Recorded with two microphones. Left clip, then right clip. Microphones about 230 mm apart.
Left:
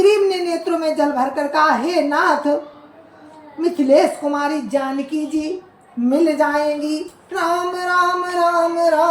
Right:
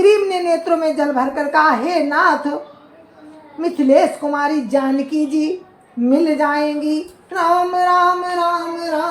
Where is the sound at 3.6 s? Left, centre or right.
Centre.